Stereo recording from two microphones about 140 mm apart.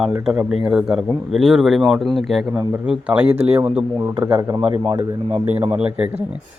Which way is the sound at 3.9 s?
25° right (ahead or behind).